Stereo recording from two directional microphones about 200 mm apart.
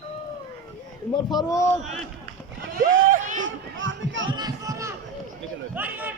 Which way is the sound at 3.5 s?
70° right (ahead or behind).